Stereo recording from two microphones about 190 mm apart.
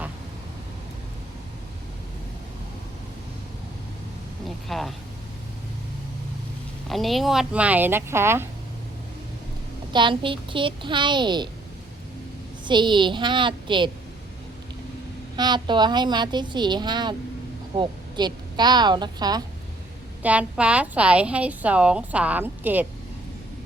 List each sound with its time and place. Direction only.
4.4 s a sound: centre (ahead or behind)
6.8 s a woman's voice: centre (ahead or behind)
9.9 s a woman's voice: 25° right (ahead or behind)
12.6 s a woman's voice: 25° right (ahead or behind)
15.4 s a woman's voice: 20° right (ahead or behind)
20.2 s a woman's voice: 5° right (ahead or behind)